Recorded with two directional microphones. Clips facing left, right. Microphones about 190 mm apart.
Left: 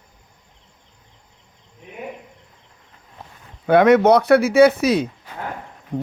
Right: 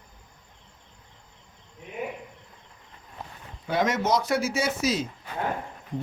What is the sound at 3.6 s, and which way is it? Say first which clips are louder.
Speech: left 12 dB; 60° left (ahead or behind).